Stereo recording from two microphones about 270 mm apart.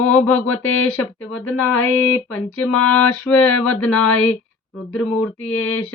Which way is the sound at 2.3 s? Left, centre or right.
Centre.